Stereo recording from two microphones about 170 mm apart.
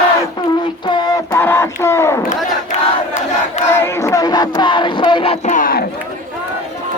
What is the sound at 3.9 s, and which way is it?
Music, 15° left (ahead or behind).